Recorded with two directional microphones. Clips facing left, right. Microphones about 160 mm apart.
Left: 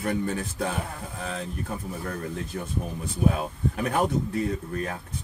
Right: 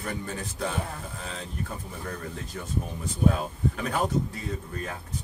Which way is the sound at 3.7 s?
55° left (ahead or behind).